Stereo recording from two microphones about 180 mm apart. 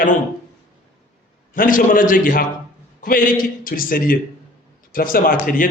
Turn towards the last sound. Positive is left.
turn(degrees=50)  # may be behind; listen again after turning